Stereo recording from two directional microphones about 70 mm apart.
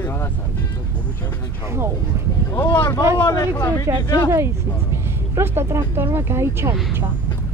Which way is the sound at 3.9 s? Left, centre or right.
Right.